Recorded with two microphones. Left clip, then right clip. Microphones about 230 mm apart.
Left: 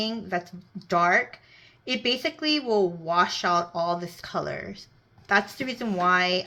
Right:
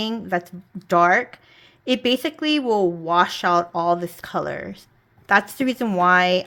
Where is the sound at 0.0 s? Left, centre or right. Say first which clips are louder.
Right 5 dB; right.